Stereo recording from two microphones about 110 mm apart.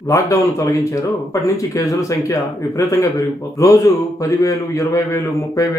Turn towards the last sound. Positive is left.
turn(degrees=30)  # may be behind; listen again after turning